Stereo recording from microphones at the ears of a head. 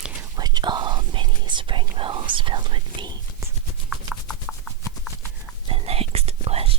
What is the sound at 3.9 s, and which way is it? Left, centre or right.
Horse, centre.